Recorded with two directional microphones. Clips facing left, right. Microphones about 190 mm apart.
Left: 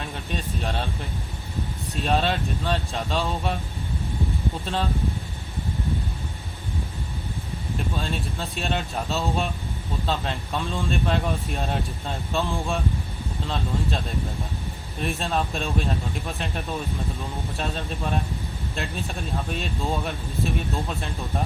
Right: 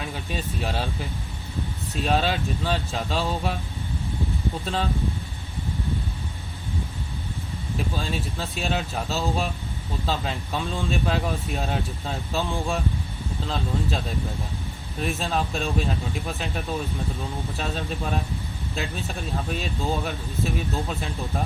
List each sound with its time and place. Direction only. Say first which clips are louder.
0.0 s speech: even; 5° right (ahead or behind)
2.0 s speech: even; centre (ahead or behind)
4.6 s speech: even; centre (ahead or behind)
7.8 s speech: right 1 dB; centre (ahead or behind)
14.9 s speech: even; centre (ahead or behind)